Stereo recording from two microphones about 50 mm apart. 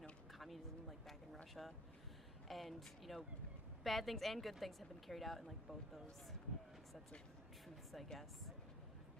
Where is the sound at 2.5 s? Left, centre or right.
Centre.